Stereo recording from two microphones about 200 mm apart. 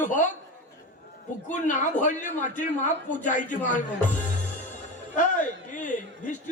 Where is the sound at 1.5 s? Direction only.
40° left (ahead or behind).